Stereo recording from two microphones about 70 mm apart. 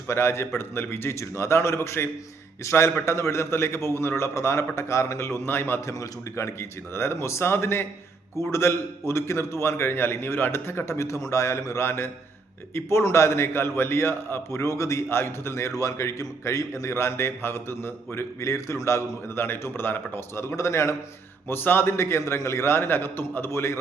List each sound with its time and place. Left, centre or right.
0.1 s a man's voice: left
5.8 s a man's voice: left
14.6 s a man's voice: left
21.5 s a man's voice: left